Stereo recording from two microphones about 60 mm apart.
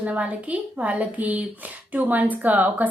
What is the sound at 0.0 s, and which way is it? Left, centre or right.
Speech, right.